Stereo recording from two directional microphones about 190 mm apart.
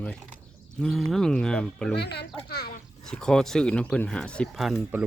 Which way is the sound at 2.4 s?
55° left (ahead or behind).